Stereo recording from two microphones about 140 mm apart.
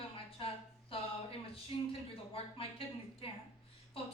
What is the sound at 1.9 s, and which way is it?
A woman's voice, 40° left (ahead or behind).